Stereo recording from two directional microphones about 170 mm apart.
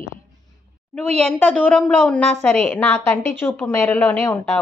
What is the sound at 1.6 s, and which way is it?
A woman's voice, 10° left (ahead or behind).